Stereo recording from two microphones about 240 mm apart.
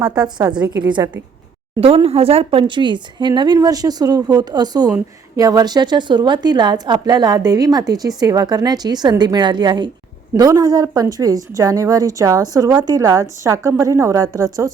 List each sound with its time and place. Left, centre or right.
0.0 s a woman's voice: centre
0.3 s a woman's voice: centre